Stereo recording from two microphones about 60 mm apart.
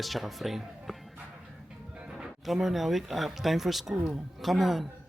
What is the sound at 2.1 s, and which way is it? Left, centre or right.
Speech, centre.